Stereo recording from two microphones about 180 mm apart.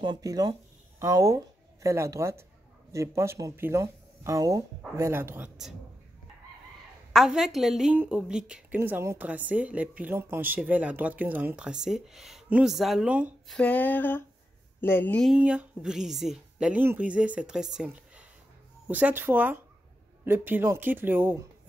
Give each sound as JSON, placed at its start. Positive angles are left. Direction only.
{"t": 0.0, "sound": "a woman's voice", "side_deg": -20}
{"t": 7.1, "sound": "a woman's voice", "side_deg": 0}
{"t": 13.6, "sound": "a sound", "side_deg": 10}
{"t": 15.3, "sound": "a woman's voice", "side_deg": -5}